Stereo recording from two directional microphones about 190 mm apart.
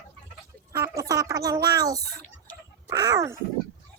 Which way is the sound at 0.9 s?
20° right (ahead or behind).